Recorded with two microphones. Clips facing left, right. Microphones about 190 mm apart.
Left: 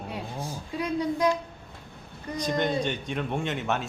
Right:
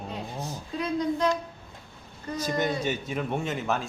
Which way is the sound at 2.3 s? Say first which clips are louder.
Left 1 dB; 5° right (ahead or behind).